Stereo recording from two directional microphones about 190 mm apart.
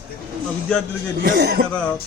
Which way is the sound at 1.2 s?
60° right (ahead or behind).